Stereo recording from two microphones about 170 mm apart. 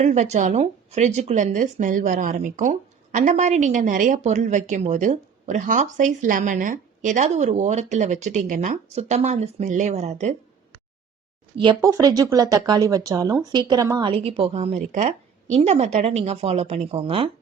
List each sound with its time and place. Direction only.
0.0 s speech: 40° right (ahead or behind)
11.6 s a woman's voice: 20° right (ahead or behind)